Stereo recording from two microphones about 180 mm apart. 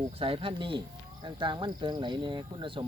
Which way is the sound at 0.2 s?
30° right (ahead or behind).